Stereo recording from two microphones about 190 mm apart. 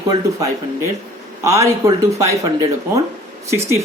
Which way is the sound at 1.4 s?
15° right (ahead or behind).